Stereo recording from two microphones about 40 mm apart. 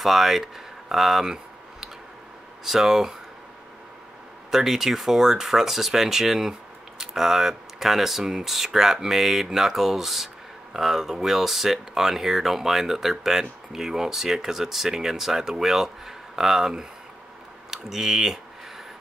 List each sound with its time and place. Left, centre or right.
0.0 s speech: centre
2.6 s speech: centre
4.5 s speech: centre